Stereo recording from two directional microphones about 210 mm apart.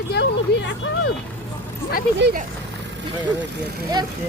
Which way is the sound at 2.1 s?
55° right (ahead or behind).